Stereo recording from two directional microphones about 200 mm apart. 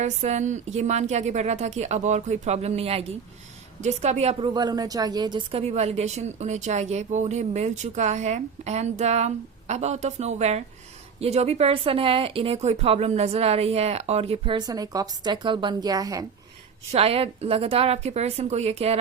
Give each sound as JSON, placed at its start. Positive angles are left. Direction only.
{"t": 0.0, "sound": "a woman's voice", "side_deg": -35}
{"t": 16.9, "sound": "a woman's voice", "side_deg": -30}